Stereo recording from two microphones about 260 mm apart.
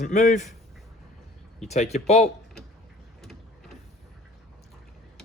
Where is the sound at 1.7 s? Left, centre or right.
Left.